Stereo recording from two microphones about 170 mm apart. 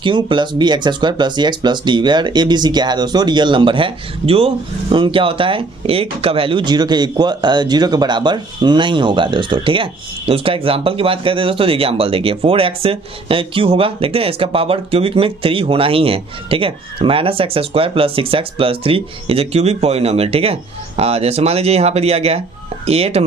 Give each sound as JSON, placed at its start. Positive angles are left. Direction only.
{"t": 0.0, "sound": "speech", "side_deg": -30}